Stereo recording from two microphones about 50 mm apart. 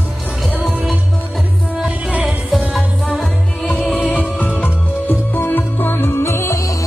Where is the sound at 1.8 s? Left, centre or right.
Centre.